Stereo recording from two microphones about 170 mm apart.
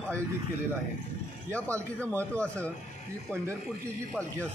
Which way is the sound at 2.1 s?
15° right (ahead or behind).